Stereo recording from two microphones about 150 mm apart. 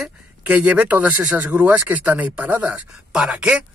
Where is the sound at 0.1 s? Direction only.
10° right (ahead or behind).